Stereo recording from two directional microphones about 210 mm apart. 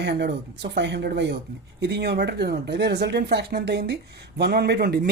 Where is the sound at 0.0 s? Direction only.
55° right (ahead or behind).